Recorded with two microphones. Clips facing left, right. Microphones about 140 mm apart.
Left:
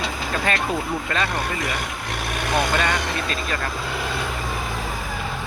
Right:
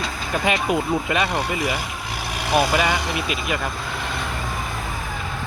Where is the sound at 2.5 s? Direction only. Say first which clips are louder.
Right 3 dB; 5° right (ahead or behind).